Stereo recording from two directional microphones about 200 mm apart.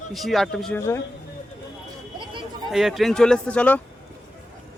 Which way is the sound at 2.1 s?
25° right (ahead or behind).